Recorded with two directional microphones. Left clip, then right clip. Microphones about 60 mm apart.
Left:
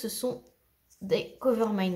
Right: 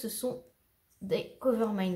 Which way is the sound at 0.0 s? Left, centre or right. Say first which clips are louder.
Left 3 dB; centre.